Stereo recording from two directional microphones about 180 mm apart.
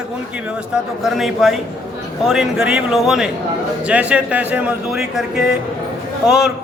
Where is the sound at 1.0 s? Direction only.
Centre (ahead or behind).